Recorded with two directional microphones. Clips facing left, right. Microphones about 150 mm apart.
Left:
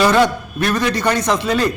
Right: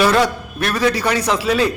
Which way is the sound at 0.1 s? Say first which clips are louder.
Left 2 dB; 5° right (ahead or behind).